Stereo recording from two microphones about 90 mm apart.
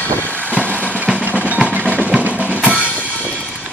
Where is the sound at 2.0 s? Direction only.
15° right (ahead or behind).